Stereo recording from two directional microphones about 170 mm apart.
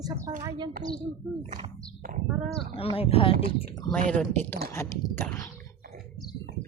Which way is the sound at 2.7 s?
35° left (ahead or behind).